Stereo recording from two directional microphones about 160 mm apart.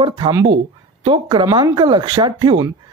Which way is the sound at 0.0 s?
30° right (ahead or behind).